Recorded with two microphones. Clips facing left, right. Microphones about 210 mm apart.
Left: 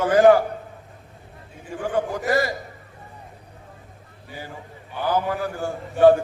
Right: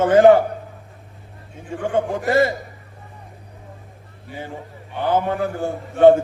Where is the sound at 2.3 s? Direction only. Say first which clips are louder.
Right 5 dB; 25° right (ahead or behind).